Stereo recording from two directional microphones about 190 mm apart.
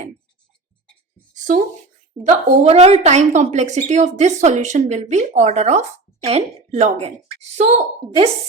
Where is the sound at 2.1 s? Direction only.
15° right (ahead or behind).